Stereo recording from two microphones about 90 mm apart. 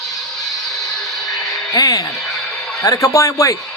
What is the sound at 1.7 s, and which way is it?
Speech, 45° left (ahead or behind).